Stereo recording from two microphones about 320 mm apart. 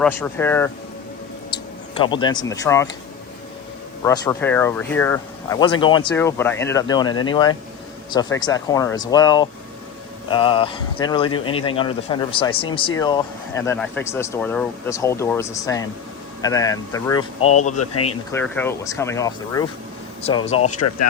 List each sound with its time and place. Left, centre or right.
0.0 s speech: centre
2.0 s speech: centre
4.0 s speech: centre
18.0 s speech: centre